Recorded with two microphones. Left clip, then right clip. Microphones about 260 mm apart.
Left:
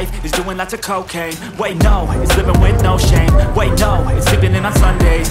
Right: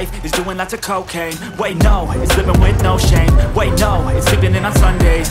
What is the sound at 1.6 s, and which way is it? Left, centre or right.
Music, centre.